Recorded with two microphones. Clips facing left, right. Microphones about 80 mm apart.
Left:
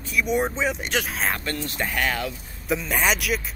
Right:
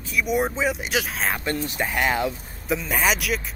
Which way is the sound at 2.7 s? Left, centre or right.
Centre.